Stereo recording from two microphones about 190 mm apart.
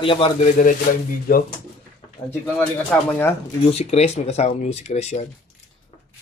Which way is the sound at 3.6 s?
35° left (ahead or behind).